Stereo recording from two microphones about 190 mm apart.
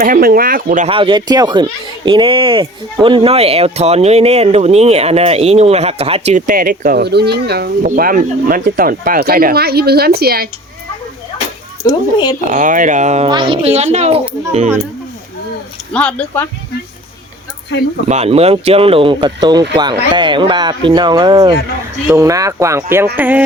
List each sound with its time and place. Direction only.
0.0 s speech: 50° right (ahead or behind)
0.9 s speech: 25° right (ahead or behind); by 10.5 s 55° right (ahead or behind)
11.8 s speech: 20° left (ahead or behind)
12.4 s speech: 40° right (ahead or behind)
13.3 s speech: 25° right (ahead or behind)
15.9 s speech: 5° left (ahead or behind)
18.1 s speech: 35° right (ahead or behind); by 23.4 s 10° right (ahead or behind)